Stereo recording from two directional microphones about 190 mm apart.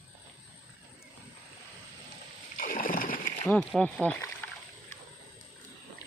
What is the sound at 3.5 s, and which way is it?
Speech, 5° left (ahead or behind).